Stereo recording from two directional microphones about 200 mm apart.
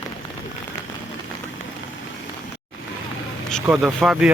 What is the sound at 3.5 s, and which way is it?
Speech, centre (ahead or behind).